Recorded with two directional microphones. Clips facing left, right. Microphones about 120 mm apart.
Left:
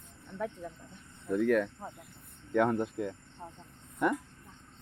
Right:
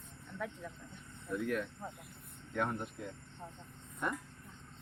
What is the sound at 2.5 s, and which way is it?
Speech, 90° left.